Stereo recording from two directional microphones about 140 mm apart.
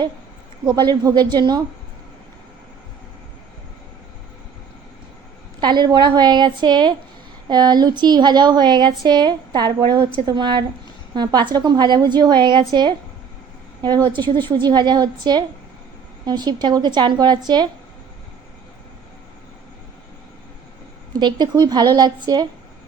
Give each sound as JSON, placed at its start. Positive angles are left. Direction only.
{"t": 0.7, "sound": "a woman's voice", "side_deg": -30}
{"t": 5.5, "sound": "speech", "side_deg": -30}
{"t": 21.1, "sound": "a woman's voice", "side_deg": -30}